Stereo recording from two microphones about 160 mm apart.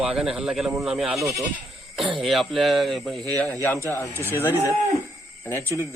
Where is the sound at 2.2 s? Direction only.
Centre (ahead or behind).